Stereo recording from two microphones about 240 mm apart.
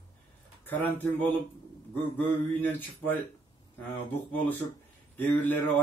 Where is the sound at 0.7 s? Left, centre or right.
Centre.